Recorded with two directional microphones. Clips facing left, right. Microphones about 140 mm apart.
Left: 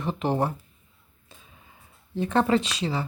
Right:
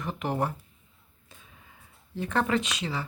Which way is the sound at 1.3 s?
30° left (ahead or behind).